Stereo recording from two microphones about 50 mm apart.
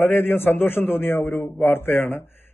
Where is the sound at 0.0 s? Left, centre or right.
Left.